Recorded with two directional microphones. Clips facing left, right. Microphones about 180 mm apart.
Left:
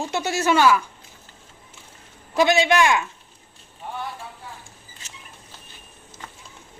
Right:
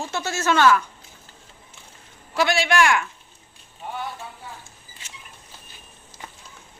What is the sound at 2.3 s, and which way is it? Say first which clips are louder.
Speech: left 3 dB; 20° left (ahead or behind).